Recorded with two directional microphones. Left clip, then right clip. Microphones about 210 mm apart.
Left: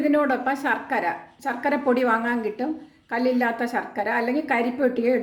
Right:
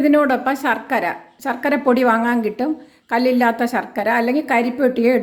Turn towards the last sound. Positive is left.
turn(degrees=-30)  # may be behind; listen again after turning